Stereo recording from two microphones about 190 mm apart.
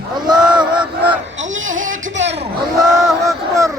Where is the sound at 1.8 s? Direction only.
80° right.